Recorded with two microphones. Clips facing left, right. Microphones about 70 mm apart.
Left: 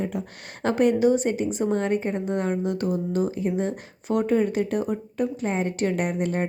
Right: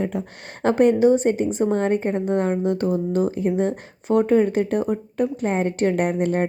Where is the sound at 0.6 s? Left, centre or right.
Right.